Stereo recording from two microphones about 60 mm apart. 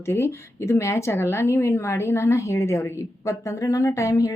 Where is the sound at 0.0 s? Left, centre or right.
Left.